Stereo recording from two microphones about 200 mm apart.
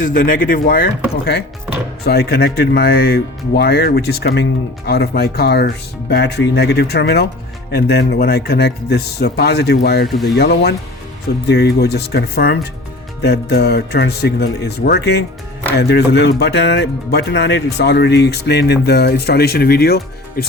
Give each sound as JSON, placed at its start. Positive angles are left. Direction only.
{"t": 0.0, "sound": "speech", "side_deg": 45}